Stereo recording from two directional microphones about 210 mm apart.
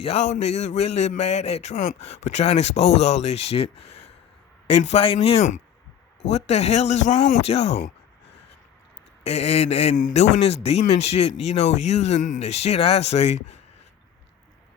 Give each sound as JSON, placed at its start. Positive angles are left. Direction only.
{"t": 0.0, "sound": "a man's voice", "side_deg": 30}
{"t": 9.2, "sound": "a man's voice", "side_deg": 30}